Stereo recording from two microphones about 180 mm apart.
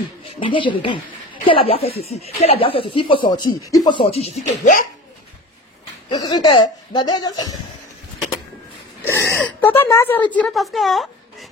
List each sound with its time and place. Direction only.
0.4 s speech: 30° left (ahead or behind)
6.0 s speech: 25° left (ahead or behind)
9.0 s wheeze: 15° left (ahead or behind)
9.3 s speech: 10° left (ahead or behind)